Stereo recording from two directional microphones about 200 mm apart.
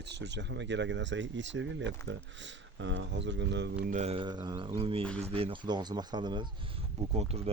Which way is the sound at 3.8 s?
35° right (ahead or behind).